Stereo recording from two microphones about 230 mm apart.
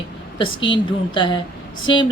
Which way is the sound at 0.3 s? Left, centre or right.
Left.